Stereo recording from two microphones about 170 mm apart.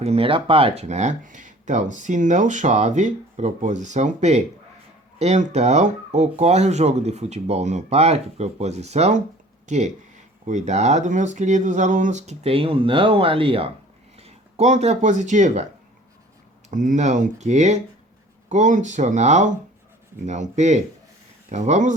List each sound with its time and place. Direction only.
0.0 s speech: 35° right (ahead or behind)
16.6 s speech: 50° right (ahead or behind)